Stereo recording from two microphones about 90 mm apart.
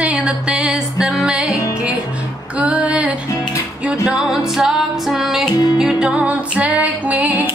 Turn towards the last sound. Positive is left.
turn(degrees=-20)  # may be behind; listen again after turning